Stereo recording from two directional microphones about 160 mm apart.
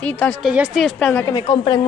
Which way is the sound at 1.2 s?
25° left (ahead or behind).